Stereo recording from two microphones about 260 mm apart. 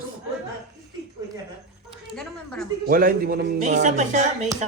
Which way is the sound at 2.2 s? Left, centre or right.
Centre.